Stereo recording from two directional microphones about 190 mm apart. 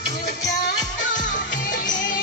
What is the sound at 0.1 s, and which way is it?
Music, 40° left (ahead or behind).